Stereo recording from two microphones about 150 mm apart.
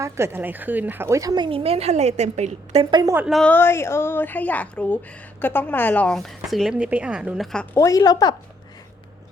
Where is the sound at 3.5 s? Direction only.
15° left (ahead or behind); by 7.4 s 5° right (ahead or behind).